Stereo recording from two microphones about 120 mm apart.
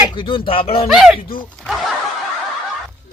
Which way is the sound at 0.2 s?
45° left (ahead or behind).